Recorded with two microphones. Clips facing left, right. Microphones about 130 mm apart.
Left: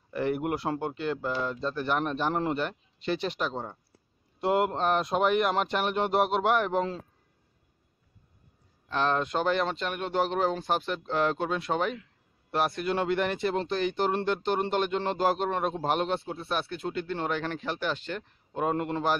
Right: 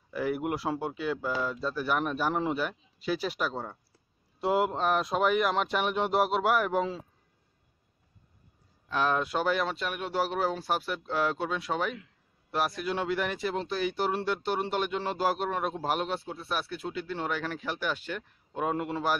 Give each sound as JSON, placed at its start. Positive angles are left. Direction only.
{"t": 0.1, "sound": "speech", "side_deg": 0}
{"t": 8.9, "sound": "a man's voice", "side_deg": -10}
{"t": 16.3, "sound": "speech", "side_deg": 25}
{"t": 16.7, "sound": "a man's voice", "side_deg": -5}